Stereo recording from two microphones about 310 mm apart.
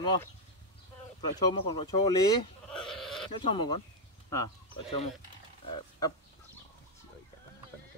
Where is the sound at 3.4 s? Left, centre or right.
Centre.